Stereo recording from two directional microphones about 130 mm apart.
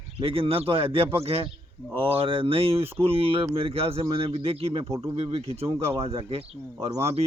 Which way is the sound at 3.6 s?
45° right (ahead or behind).